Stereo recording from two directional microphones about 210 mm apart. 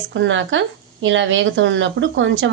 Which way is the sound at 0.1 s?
65° right (ahead or behind).